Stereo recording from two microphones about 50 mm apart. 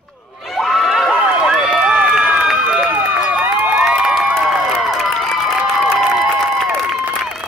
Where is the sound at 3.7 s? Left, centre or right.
Centre.